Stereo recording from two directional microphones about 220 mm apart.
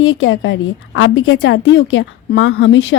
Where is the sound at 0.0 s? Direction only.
65° left (ahead or behind).